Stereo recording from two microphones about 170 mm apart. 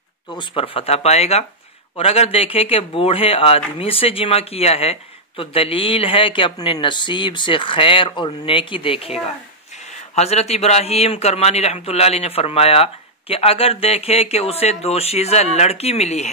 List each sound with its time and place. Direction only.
0.3 s a man's voice: 30° left (ahead or behind)